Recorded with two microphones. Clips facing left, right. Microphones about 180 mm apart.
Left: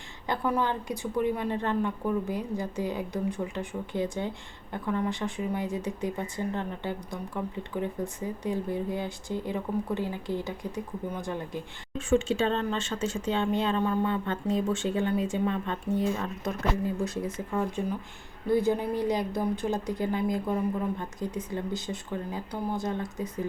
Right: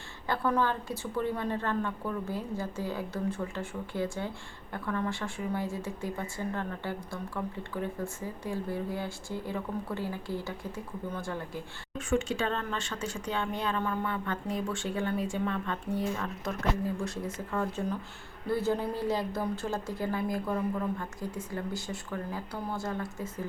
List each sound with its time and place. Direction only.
0.3 s a woman's voice: 15° left (ahead or behind)